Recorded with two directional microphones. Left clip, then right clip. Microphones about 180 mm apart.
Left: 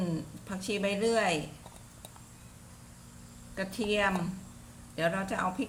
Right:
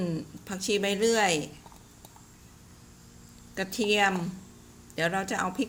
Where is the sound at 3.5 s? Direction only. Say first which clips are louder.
Right 4 dB; 40° right (ahead or behind).